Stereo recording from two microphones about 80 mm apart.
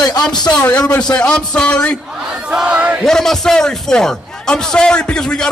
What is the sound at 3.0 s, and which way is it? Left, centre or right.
A man's voice, centre.